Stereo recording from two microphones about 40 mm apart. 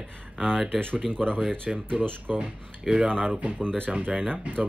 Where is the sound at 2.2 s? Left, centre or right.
Right.